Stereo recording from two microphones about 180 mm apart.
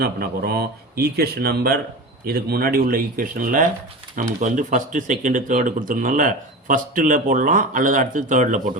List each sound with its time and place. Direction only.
0.0 s speech: 60° right (ahead or behind)